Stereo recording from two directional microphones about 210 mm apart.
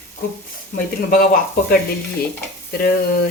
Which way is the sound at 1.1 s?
40° left (ahead or behind).